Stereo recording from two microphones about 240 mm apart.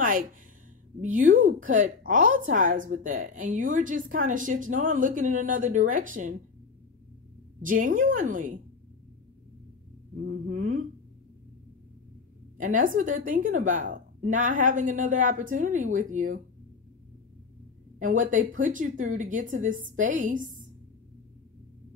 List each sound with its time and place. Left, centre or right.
0.0 s a sound: right
1.1 s a woman's voice: right
7.6 s a woman's voice: right
10.1 s a woman's voice: right
12.5 s a woman's voice: right
17.9 s a woman's voice: right